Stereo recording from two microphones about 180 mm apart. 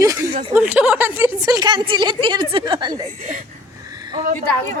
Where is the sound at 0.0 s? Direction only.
20° right (ahead or behind).